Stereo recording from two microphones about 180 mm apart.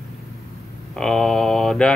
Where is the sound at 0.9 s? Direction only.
5° left (ahead or behind).